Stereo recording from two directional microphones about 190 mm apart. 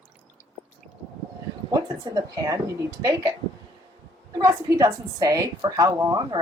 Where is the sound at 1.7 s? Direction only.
20° right (ahead or behind).